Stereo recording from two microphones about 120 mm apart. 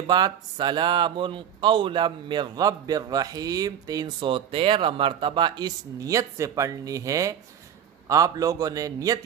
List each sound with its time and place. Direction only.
0.0 s a man's voice: 35° right (ahead or behind)